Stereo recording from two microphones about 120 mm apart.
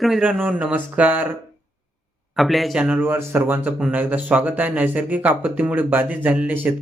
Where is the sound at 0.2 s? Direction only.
10° right (ahead or behind).